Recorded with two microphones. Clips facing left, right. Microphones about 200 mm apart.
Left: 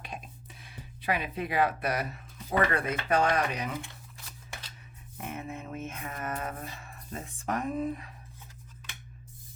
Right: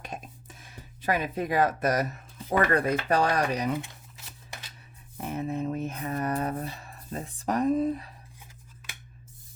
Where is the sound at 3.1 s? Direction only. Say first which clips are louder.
Left 1 dB; 40° right (ahead or behind).